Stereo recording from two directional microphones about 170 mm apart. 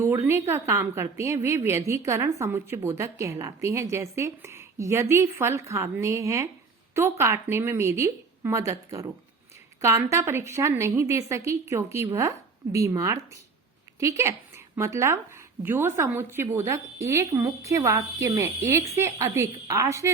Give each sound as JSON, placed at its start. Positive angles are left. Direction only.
{"t": 0.0, "sound": "a woman's voice", "side_deg": -15}